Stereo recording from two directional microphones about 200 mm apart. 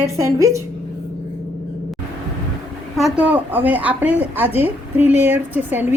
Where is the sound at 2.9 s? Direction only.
5° right (ahead or behind).